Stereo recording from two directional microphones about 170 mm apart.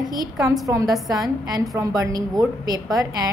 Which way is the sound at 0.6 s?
20° right (ahead or behind).